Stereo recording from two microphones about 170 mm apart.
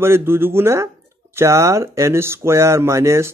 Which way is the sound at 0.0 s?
15° right (ahead or behind).